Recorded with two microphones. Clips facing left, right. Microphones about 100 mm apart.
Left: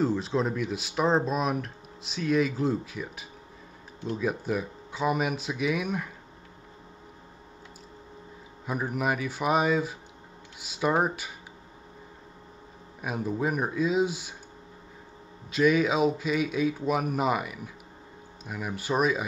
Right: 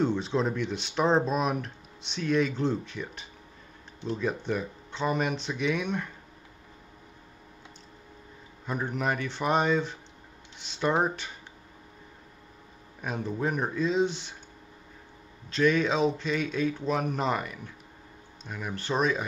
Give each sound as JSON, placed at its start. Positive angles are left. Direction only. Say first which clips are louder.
{"t": 0.0, "sound": "speech", "louder": "even", "side_deg": 0}
{"t": 8.6, "sound": "speech", "louder": "left 1 dB", "side_deg": 5}
{"t": 13.0, "sound": "speech", "louder": "left 1 dB", "side_deg": 5}
{"t": 15.5, "sound": "speech", "louder": "left 1 dB", "side_deg": 5}